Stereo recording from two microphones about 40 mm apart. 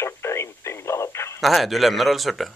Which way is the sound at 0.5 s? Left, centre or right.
Left.